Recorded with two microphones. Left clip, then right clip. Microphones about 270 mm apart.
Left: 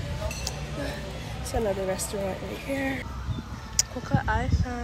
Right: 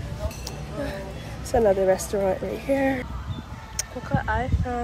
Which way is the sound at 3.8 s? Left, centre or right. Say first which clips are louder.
Left 1 dB; centre.